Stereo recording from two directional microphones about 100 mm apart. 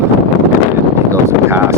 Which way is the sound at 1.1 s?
25° right (ahead or behind).